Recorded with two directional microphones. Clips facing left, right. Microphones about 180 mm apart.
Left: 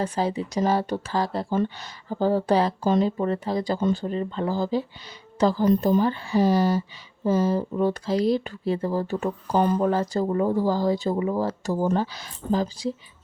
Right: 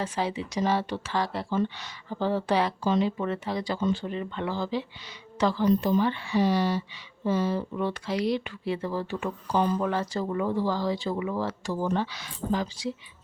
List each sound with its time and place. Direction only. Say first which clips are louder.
0.0 s speech: left 4 dB; 40° left (ahead or behind)
12.4 s speech: left 3 dB; 50° right (ahead or behind)